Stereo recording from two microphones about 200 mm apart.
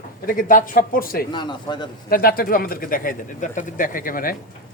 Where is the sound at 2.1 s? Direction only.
45° left (ahead or behind).